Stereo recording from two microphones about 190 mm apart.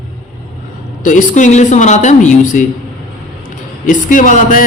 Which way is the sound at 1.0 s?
40° left (ahead or behind).